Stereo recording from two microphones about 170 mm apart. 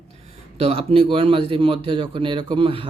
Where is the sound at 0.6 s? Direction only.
35° right (ahead or behind).